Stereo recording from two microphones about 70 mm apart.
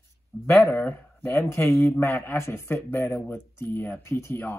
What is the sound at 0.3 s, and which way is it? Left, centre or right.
Speech, left.